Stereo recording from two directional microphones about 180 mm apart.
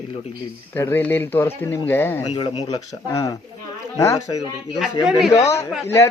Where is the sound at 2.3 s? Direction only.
30° left (ahead or behind).